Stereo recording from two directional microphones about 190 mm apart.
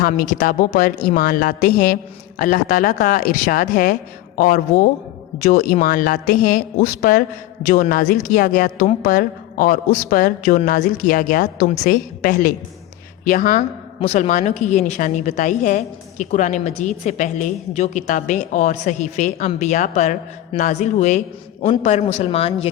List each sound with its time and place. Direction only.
0.0 s a woman's voice: 45° left (ahead or behind); by 22.7 s 30° left (ahead or behind)